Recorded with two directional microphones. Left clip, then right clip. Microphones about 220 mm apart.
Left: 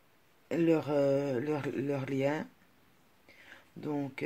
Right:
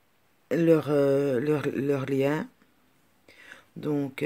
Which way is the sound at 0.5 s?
35° right (ahead or behind).